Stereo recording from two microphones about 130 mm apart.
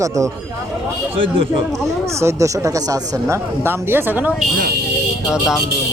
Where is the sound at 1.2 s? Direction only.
45° right (ahead or behind).